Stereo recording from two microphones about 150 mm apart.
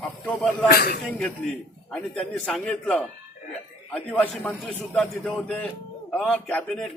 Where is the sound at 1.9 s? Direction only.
5° left (ahead or behind).